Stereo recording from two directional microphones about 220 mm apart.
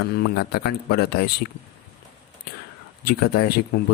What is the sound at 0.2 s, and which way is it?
Speech, 45° left (ahead or behind).